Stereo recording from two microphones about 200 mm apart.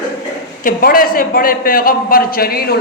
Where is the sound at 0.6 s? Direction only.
45° left (ahead or behind).